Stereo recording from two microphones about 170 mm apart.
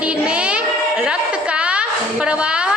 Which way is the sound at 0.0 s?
5° right (ahead or behind).